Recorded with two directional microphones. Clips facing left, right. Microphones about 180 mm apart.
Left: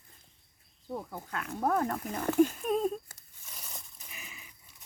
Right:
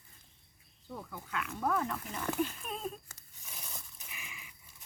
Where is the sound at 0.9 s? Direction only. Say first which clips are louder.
Left 5 dB; 45° left (ahead or behind).